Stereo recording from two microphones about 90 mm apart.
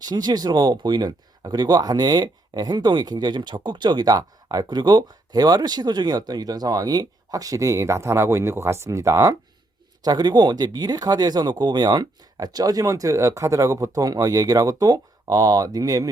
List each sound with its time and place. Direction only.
0.0 s speech: 50° right (ahead or behind); by 9.3 s 35° right (ahead or behind)
10.0 s speech: 50° right (ahead or behind)